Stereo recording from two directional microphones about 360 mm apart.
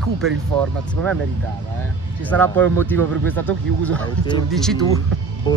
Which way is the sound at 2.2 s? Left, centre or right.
Centre.